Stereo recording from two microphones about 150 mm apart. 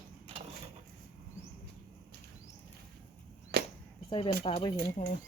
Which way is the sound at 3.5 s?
90° right.